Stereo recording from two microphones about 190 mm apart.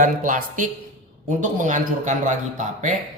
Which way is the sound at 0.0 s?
45° right (ahead or behind).